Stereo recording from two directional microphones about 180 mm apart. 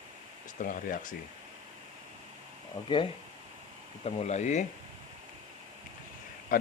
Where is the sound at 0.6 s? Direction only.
50° left (ahead or behind).